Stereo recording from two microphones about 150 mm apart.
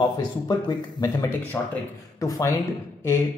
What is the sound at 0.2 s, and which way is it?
Speech, 25° left (ahead or behind).